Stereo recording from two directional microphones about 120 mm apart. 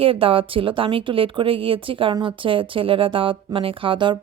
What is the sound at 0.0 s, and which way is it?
Speech, 50° right (ahead or behind).